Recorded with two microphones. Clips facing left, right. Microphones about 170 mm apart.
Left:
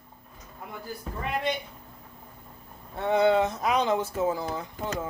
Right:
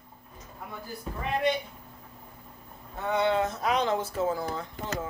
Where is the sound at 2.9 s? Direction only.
30° left (ahead or behind).